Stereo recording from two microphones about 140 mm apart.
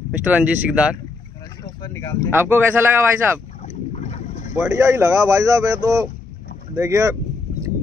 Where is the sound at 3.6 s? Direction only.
55° left (ahead or behind).